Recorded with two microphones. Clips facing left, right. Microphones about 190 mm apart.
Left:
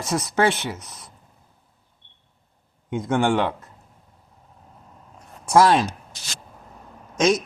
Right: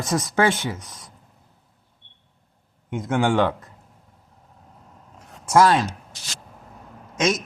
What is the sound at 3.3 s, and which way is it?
Speech, 45° right (ahead or behind).